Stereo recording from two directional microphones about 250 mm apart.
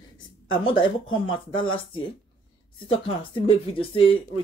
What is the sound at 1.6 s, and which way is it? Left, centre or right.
Speech, centre.